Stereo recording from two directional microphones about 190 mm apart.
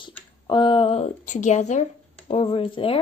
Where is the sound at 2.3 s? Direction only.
30° left (ahead or behind).